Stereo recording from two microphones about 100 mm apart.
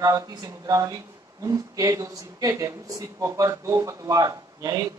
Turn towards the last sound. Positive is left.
turn(degrees=-35)  # may be behind; listen again after turning